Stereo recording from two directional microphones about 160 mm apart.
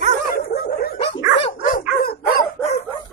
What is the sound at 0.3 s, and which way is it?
Dog, 65° left (ahead or behind).